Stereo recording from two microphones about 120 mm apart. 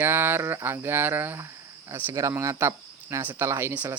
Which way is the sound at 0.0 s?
15° right (ahead or behind).